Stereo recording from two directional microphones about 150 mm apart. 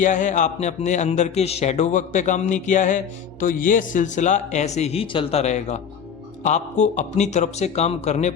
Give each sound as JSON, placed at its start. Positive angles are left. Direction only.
{"t": 0.0, "sound": "speech", "side_deg": 55}